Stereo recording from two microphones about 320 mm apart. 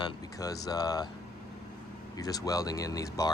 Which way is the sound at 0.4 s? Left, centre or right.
Centre.